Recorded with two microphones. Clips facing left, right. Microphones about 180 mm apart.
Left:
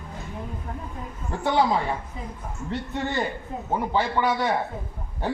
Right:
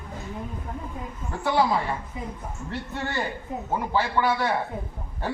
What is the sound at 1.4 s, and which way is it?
Speech, 20° left (ahead or behind).